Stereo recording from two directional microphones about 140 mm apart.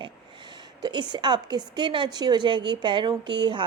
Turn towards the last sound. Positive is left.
turn(degrees=-35)  # may be behind; listen again after turning